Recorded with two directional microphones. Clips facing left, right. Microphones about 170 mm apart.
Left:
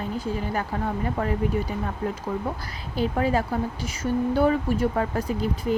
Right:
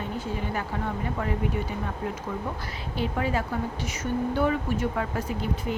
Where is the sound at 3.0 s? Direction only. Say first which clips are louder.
Left 4 dB; 40° left (ahead or behind).